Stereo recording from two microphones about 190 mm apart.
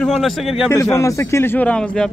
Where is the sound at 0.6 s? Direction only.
15° left (ahead or behind).